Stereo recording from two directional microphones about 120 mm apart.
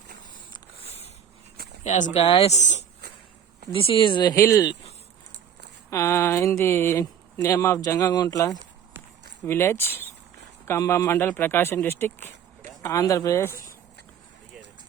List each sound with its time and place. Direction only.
1.8 s speech: 90° left
2.2 s a woman's voice: 55° left (ahead or behind); by 2.8 s 75° left (ahead or behind)
3.7 s speech: 50° left (ahead or behind)
4.4 s speech: 25° left (ahead or behind)
5.9 s speech: 25° left (ahead or behind)
9.5 s speech: 20° left (ahead or behind)